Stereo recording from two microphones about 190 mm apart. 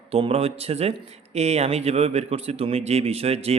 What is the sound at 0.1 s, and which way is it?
Speech, 30° right (ahead or behind).